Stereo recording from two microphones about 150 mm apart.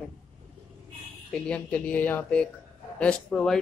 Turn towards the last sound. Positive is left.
turn(degrees=5)  # may be behind; listen again after turning